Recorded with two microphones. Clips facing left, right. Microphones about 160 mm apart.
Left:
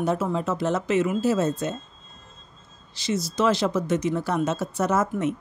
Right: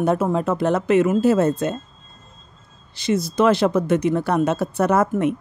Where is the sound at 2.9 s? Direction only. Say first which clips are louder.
Right 6 dB; 55° right (ahead or behind).